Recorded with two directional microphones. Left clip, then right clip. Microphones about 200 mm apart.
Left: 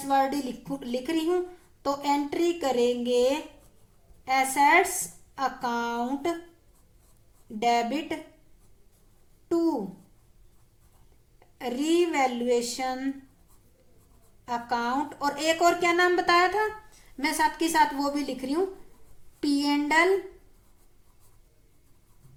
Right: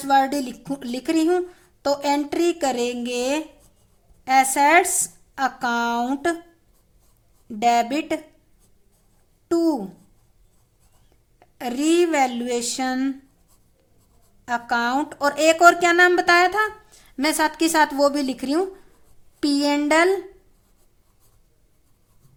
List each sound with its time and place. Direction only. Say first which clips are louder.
0.1 s speech: right 6 dB; 50° right (ahead or behind)
7.6 s speech: right 6 dB; 45° right (ahead or behind)
9.5 s speech: right 5 dB; 45° right (ahead or behind)
11.3 s speech: right 5 dB; 45° right (ahead or behind)
14.4 s speech: right 6 dB; 45° right (ahead or behind)